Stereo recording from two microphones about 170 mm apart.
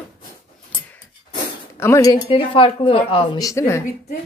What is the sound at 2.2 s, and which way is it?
Speech, 30° left (ahead or behind).